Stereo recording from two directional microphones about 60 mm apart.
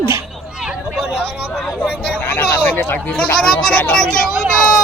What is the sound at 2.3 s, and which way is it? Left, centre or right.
Speech, left.